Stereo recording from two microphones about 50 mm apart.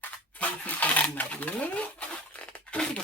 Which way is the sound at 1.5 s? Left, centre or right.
Left.